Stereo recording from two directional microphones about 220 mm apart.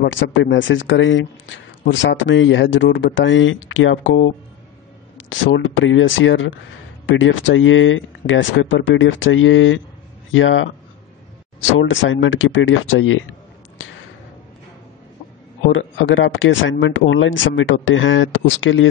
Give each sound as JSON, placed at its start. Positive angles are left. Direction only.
{"t": 0.0, "sound": "speech", "side_deg": 55}
{"t": 11.7, "sound": "speech", "side_deg": 60}
{"t": 13.8, "sound": "a sound", "side_deg": 60}
{"t": 15.7, "sound": "speech", "side_deg": 60}